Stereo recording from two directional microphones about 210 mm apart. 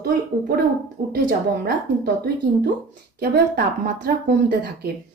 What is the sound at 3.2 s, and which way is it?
Speech, 45° right (ahead or behind).